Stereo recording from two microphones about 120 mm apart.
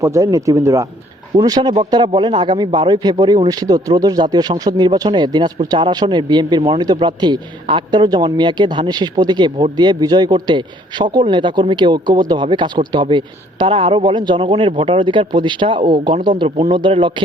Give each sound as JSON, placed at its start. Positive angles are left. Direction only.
{"t": 0.0, "sound": "a man's voice", "side_deg": -25}